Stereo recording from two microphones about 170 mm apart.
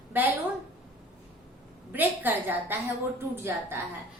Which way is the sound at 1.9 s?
10° right (ahead or behind).